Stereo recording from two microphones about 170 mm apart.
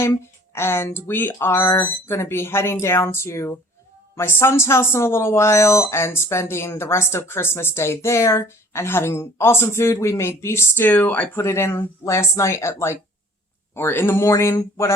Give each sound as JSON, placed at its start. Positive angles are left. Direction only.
{"t": 0.0, "sound": "speech", "side_deg": 15}